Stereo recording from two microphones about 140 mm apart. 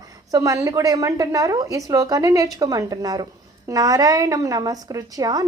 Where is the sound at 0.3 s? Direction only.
25° right (ahead or behind).